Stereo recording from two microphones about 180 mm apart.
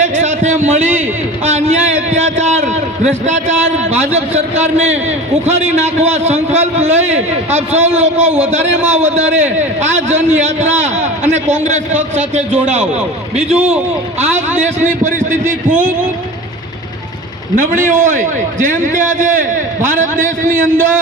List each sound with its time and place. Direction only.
0.0 s a sound: 40° right (ahead or behind)
4.1 s a man's voice: 40° right (ahead or behind)
13.3 s a man's voice: 5° right (ahead or behind)
17.6 s a man's voice: 45° right (ahead or behind)
19.9 s a man's voice: 45° right (ahead or behind)